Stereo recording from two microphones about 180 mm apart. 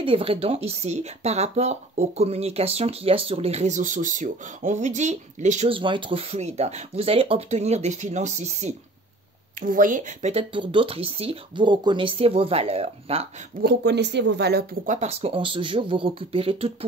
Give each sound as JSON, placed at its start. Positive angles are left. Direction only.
{"t": 0.0, "sound": "speech", "side_deg": -30}
{"t": 9.6, "sound": "speech", "side_deg": -50}
{"t": 13.6, "sound": "speech", "side_deg": -65}
{"t": 14.9, "sound": "speech", "side_deg": -35}